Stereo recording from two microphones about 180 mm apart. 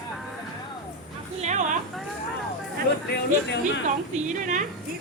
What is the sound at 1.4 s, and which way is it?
Speech, 40° right (ahead or behind).